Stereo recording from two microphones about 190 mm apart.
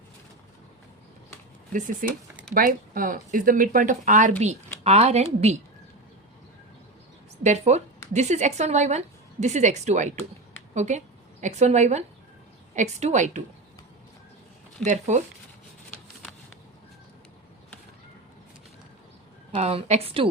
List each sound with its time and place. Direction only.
2.0 s a woman's voice: 45° right (ahead or behind)
7.4 s a woman's voice: 35° right (ahead or behind)
14.8 s a woman's voice: 40° right (ahead or behind)
19.5 s a woman's voice: 35° right (ahead or behind)